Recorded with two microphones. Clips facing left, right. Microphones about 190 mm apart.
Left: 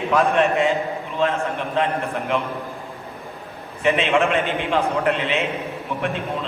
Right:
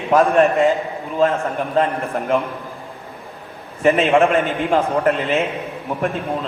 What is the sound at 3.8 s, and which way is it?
A man's voice, 40° right (ahead or behind).